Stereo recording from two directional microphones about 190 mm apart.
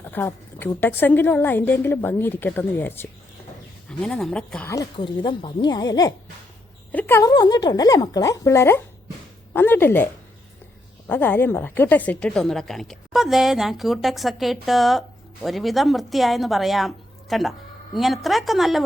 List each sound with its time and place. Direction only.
0.1 s a woman's voice: 10° left (ahead or behind)
4.7 s a woman's voice: 20° left (ahead or behind)
11.1 s a woman's voice: 10° left (ahead or behind)